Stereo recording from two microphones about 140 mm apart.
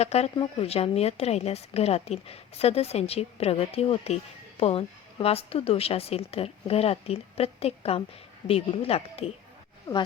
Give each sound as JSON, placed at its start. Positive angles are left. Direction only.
{"t": 0.0, "sound": "a woman's voice", "side_deg": 50}
{"t": 9.9, "sound": "speech", "side_deg": 25}